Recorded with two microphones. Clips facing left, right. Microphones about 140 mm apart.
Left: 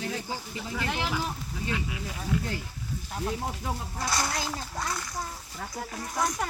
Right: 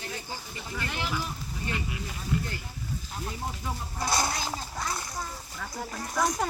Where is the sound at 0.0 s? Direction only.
90° left.